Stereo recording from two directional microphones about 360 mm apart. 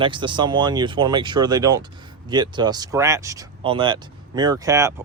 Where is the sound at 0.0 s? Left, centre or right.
Centre.